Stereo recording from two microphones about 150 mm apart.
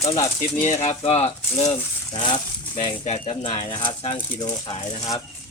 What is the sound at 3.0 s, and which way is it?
Speech, 50° left (ahead or behind).